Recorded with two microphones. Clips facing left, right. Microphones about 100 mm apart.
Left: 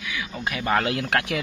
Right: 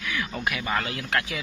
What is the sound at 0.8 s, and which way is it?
Speech, 80° left.